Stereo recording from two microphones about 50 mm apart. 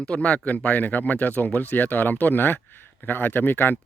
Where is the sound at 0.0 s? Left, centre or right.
Left.